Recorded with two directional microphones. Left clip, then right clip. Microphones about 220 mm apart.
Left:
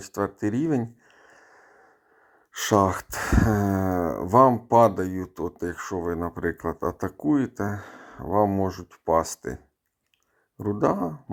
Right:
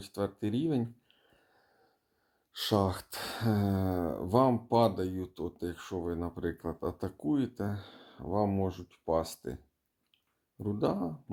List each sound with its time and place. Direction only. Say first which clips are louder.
0.0 s a sound: left 8 dB; 25° left (ahead or behind)
2.6 s speech: left 9 dB; 25° left (ahead or behind)
10.6 s speech: left 8 dB; 20° left (ahead or behind)